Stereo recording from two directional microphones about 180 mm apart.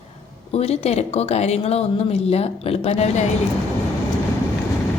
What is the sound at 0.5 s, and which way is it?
A woman's voice, 35° left (ahead or behind).